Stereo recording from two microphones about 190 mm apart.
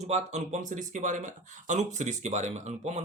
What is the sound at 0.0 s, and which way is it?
Speech, 35° right (ahead or behind).